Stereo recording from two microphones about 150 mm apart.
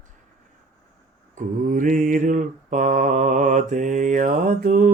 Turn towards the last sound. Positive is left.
turn(degrees=-60)  # may be behind; listen again after turning